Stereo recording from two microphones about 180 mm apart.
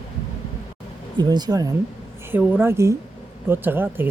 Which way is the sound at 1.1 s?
25° right (ahead or behind).